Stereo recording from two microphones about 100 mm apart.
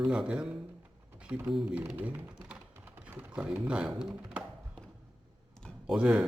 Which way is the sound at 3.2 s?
10° right (ahead or behind).